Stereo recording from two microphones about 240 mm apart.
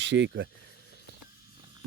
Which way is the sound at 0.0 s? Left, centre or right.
Right.